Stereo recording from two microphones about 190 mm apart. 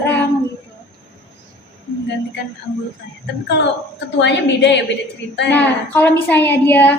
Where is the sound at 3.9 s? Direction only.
65° left (ahead or behind).